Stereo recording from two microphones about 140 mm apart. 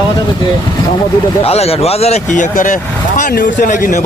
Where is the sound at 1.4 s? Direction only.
45° left (ahead or behind).